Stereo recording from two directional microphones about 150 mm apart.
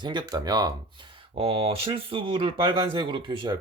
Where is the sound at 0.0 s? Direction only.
30° right (ahead or behind).